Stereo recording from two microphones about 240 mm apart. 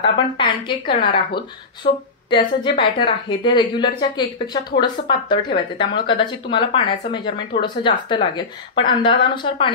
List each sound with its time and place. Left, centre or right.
0.4 s speech: centre